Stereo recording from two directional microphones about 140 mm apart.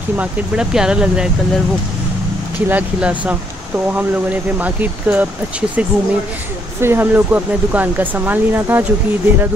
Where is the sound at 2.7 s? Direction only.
10° right (ahead or behind).